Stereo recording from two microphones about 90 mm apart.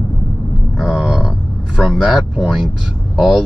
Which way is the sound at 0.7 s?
5° right (ahead or behind).